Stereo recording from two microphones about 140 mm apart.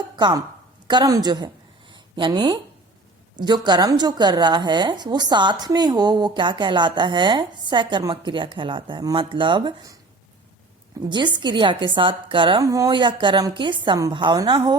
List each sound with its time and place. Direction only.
0.2 s a woman's voice: 30° right (ahead or behind)
1.9 s a sound: 35° right (ahead or behind)
3.4 s a woman's voice: 30° right (ahead or behind)
11.1 s a woman's voice: 35° right (ahead or behind)
12.6 s a woman's voice: 25° right (ahead or behind)